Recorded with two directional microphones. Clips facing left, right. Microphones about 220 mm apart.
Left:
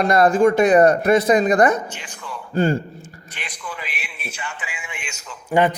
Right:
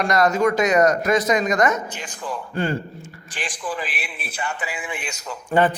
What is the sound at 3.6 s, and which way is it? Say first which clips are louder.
Speech: right 5 dB; 35° right (ahead or behind).